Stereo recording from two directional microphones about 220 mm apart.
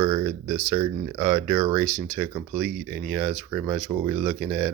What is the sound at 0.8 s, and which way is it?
Speech, 10° right (ahead or behind).